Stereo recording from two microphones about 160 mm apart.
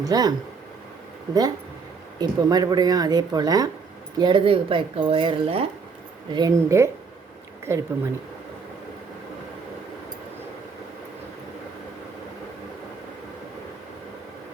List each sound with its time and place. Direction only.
0.0 s speech: 25° right (ahead or behind)
6.3 s speech: 20° right (ahead or behind)